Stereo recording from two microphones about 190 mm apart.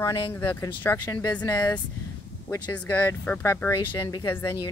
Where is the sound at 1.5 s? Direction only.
20° left (ahead or behind).